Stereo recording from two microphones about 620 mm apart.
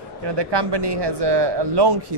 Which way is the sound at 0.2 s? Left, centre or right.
Right.